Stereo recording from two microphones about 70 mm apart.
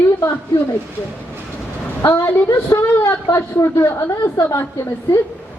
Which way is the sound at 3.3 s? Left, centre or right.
Left.